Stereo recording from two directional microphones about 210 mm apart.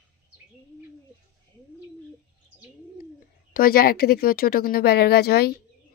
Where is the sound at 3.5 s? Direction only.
45° left (ahead or behind).